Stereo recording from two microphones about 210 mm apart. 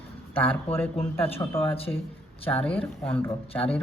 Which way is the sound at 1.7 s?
25° left (ahead or behind).